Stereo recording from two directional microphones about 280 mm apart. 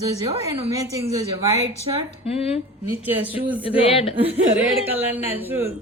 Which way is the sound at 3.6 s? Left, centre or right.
Centre.